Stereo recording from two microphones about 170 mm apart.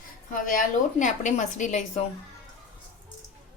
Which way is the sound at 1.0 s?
45° left (ahead or behind).